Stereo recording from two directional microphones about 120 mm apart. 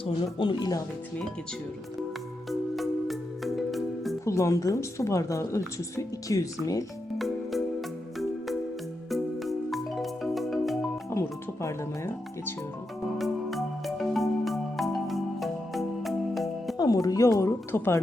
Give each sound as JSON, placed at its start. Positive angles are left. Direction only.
{"t": 0.0, "sound": "speech", "side_deg": 45}
{"t": 2.5, "sound": "music", "side_deg": 0}
{"t": 4.3, "sound": "a woman's voice", "side_deg": 25}
{"t": 7.2, "sound": "music", "side_deg": 0}
{"t": 11.1, "sound": "speech", "side_deg": 25}
{"t": 13.1, "sound": "music", "side_deg": 0}
{"t": 16.7, "sound": "a woman's voice", "side_deg": 30}